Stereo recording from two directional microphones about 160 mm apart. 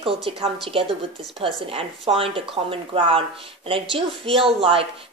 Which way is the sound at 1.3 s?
35° right (ahead or behind).